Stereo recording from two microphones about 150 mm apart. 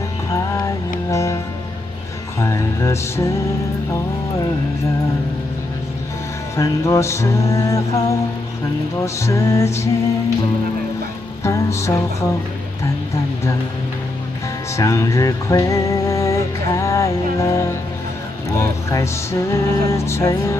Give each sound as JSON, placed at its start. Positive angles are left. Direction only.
{"t": 0.3, "sound": "music", "side_deg": 20}
{"t": 6.5, "sound": "music", "side_deg": 20}
{"t": 11.4, "sound": "music", "side_deg": 20}
{"t": 14.8, "sound": "music", "side_deg": 20}